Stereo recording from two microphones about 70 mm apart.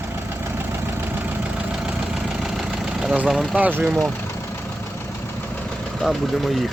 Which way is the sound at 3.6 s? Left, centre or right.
Right.